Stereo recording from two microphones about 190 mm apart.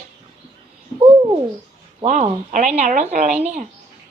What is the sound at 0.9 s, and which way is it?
Bird, 25° right (ahead or behind).